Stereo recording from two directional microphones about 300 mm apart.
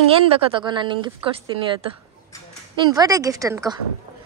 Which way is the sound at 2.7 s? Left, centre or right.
Centre.